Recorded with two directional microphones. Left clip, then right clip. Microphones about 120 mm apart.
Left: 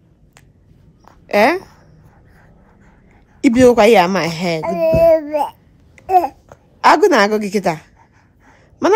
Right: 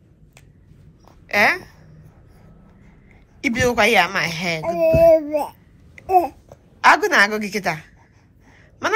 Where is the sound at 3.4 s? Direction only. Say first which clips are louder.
Left 8 dB; 70° left (ahead or behind).